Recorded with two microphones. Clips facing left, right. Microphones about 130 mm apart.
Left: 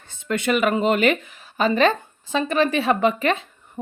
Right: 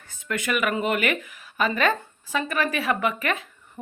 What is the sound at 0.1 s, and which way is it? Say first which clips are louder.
A woman's voice: left 5 dB; 25° left (ahead or behind).